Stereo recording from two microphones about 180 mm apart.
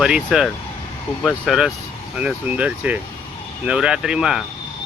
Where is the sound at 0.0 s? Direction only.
5° right (ahead or behind).